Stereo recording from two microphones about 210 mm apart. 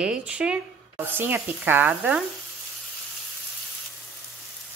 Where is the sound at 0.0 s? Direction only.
5° right (ahead or behind).